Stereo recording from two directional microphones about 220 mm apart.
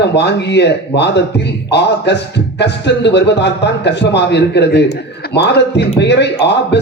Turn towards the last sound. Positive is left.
turn(degrees=50)  # may be behind; listen again after turning